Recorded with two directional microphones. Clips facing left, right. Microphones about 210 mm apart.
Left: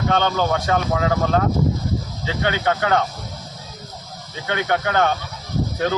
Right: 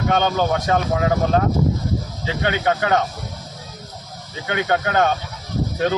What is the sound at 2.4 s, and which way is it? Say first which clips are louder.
Speech: right 1 dB; 20° right (ahead or behind).